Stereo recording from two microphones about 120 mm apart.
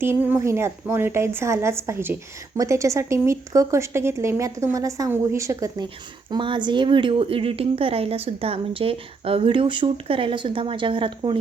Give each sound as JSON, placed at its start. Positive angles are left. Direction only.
{"t": 0.0, "sound": "speech", "side_deg": -20}
{"t": 6.3, "sound": "a woman's voice", "side_deg": -40}